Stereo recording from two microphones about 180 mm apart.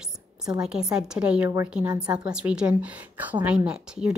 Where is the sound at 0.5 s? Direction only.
5° right (ahead or behind).